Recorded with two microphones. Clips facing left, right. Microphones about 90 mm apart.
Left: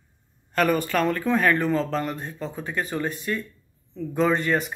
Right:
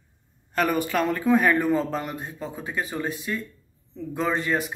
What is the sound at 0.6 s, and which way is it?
Speech, 5° right (ahead or behind).